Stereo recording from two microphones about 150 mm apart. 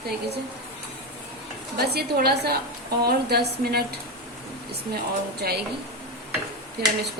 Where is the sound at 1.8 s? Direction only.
90° right.